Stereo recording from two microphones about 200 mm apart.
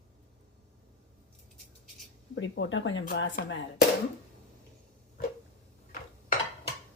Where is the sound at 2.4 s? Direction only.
70° left (ahead or behind).